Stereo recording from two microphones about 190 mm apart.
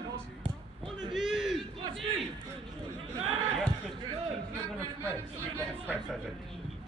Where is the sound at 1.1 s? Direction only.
Centre (ahead or behind).